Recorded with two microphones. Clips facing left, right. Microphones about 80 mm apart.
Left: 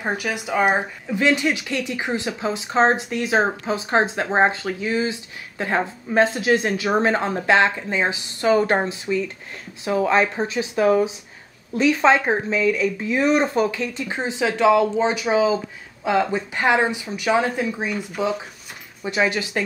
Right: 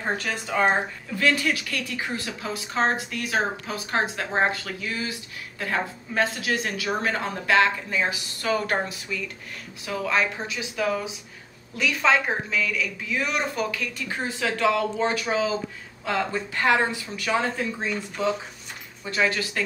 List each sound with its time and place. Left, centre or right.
0.0 s speech: centre